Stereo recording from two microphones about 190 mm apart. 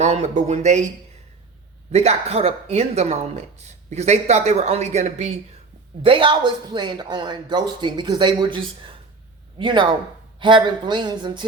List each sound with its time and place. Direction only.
0.0 s speech: 35° right (ahead or behind)
1.9 s speech: 35° right (ahead or behind)